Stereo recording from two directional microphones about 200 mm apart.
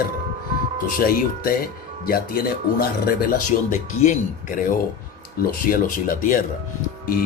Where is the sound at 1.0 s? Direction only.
45° left (ahead or behind).